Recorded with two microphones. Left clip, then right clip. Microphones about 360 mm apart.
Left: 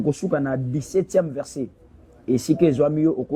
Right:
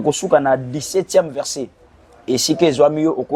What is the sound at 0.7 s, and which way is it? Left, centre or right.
A man's voice, right.